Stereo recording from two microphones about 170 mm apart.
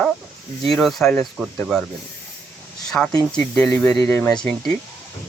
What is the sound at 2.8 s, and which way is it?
Speech, 5° left (ahead or behind).